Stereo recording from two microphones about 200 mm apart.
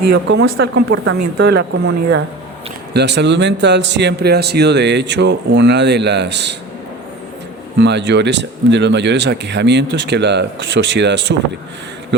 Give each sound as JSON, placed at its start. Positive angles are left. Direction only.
{"t": 0.0, "sound": "a man's voice", "side_deg": -55}
{"t": 1.0, "sound": "a man's voice", "side_deg": -55}
{"t": 7.8, "sound": "a man's voice", "side_deg": -60}